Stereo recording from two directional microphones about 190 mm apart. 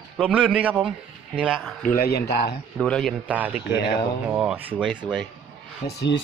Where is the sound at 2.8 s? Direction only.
5° left (ahead or behind).